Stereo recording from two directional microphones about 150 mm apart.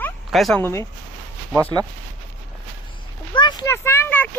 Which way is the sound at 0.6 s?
20° left (ahead or behind).